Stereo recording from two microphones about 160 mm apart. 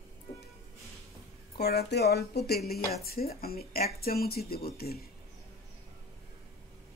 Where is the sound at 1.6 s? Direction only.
85° left.